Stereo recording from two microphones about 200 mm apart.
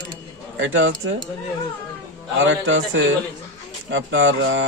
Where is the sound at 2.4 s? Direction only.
75° right (ahead or behind).